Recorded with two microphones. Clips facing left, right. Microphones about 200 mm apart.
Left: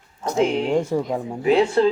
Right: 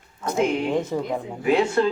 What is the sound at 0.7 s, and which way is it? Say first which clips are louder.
Speech: left 3 dB; 10° left (ahead or behind).